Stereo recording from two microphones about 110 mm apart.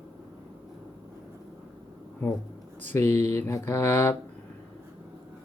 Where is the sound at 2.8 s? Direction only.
20° left (ahead or behind).